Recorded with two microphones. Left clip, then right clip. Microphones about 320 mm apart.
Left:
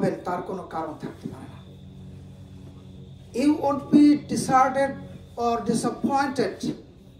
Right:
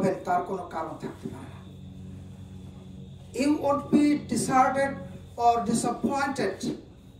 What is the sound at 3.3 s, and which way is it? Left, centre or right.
Speech, centre.